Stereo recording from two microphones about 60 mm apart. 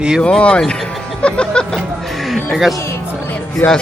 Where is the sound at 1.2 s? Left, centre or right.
Centre.